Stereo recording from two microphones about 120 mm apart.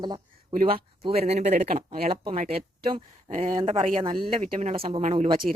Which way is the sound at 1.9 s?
55° right (ahead or behind).